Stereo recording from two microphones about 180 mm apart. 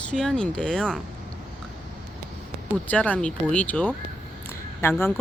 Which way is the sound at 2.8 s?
10° left (ahead or behind).